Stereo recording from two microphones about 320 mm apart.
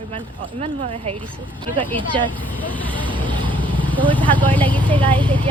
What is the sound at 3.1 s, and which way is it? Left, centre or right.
Vehicle, centre.